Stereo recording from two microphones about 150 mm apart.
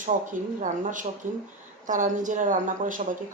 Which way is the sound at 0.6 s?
60° right (ahead or behind).